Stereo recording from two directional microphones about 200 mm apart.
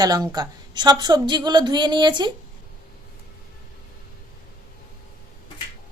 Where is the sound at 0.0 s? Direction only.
20° right (ahead or behind).